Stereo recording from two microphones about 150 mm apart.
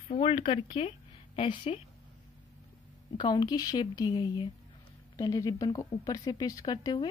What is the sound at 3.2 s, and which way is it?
Speech, 30° left (ahead or behind).